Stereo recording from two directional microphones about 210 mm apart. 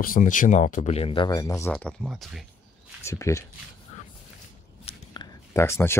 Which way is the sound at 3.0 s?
15° left (ahead or behind).